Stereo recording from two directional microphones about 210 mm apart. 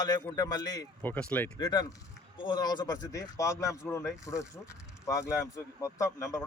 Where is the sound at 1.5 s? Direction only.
20° left (ahead or behind).